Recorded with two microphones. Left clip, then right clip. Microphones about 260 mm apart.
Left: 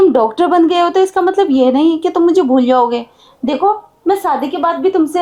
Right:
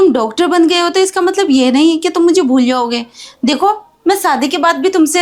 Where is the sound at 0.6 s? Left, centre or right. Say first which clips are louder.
Even; right.